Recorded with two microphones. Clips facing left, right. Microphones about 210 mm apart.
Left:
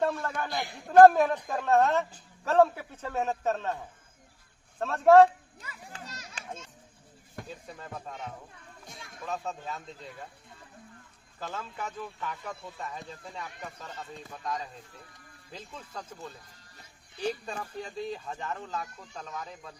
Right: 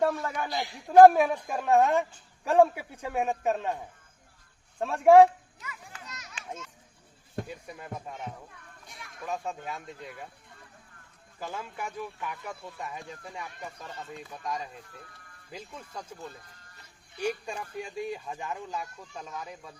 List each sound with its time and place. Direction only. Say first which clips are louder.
0.0 s speech: right 2 dB; 10° right (ahead or behind)
4.8 s speech: right 1 dB; 10° right (ahead or behind)
5.5 s children playing: left 1 dB; 30° left (ahead or behind)
7.4 s speech: right 2 dB; 10° right (ahead or behind)
11.3 s speech: right 1 dB; 10° right (ahead or behind)